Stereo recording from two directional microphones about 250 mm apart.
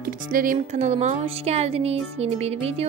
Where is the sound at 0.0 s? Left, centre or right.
Right.